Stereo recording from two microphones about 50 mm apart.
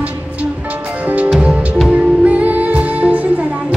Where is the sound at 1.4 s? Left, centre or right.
Right.